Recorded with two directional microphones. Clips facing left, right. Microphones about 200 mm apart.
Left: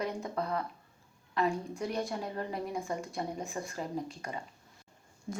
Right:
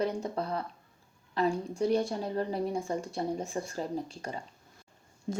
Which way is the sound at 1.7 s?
30° right (ahead or behind).